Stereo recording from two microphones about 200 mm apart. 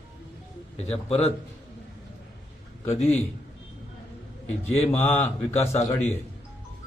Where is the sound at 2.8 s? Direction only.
30° left (ahead or behind).